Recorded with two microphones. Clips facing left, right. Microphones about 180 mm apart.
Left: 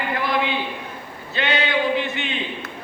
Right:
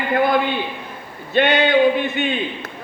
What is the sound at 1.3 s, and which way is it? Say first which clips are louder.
Speech: right 7 dB; 55° right (ahead or behind).